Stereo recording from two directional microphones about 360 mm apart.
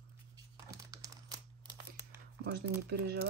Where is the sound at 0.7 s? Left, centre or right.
Centre.